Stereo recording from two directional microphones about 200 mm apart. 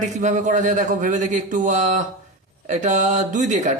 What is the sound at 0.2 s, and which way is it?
Speech, 40° right (ahead or behind).